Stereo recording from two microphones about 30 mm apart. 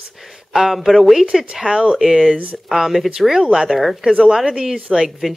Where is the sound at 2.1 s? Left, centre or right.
Centre.